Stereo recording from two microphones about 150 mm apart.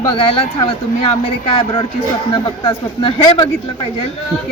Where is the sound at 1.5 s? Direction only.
35° left (ahead or behind).